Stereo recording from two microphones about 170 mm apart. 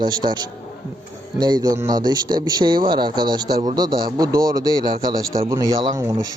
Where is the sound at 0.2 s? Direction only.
35° right (ahead or behind).